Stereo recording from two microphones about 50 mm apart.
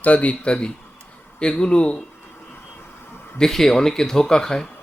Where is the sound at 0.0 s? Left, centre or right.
Left.